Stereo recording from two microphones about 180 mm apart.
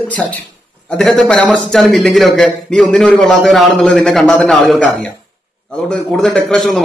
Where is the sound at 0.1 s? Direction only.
10° left (ahead or behind).